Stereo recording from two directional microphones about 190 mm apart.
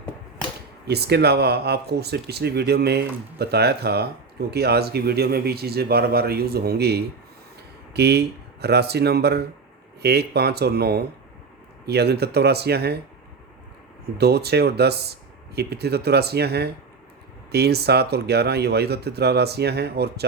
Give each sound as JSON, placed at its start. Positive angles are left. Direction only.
{"t": 0.9, "sound": "speech", "side_deg": -60}
{"t": 14.2, "sound": "speech", "side_deg": -60}